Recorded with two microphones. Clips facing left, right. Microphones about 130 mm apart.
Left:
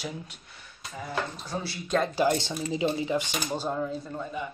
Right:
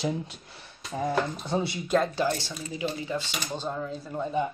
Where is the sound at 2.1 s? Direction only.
15° left (ahead or behind).